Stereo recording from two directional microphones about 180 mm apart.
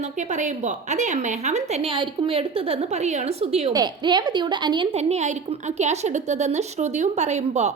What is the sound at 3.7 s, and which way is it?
A woman's voice, 25° right (ahead or behind).